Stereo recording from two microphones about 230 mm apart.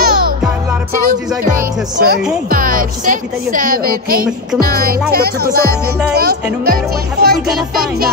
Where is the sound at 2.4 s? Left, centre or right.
Right.